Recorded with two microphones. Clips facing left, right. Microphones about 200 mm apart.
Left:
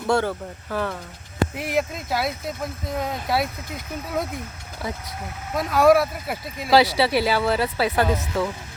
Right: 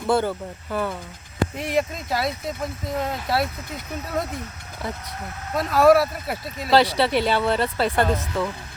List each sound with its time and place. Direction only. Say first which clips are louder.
0.1 s speech: even; 5° right (ahead or behind)
5.5 s speech: right 1 dB; centre (ahead or behind)